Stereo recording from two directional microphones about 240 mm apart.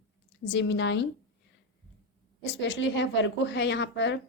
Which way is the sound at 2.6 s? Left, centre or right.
Left.